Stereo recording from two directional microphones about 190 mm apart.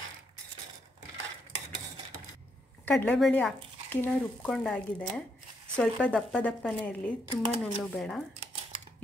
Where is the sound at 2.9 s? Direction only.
5° left (ahead or behind).